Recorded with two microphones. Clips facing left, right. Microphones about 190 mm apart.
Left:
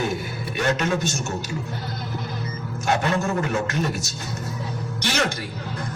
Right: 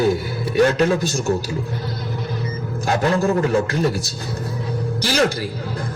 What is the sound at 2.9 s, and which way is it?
A man's voice, 35° right (ahead or behind).